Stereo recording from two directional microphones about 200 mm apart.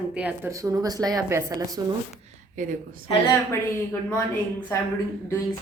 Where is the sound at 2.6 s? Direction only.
40° right (ahead or behind).